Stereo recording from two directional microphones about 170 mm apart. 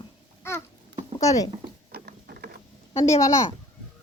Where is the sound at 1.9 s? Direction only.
65° right (ahead or behind).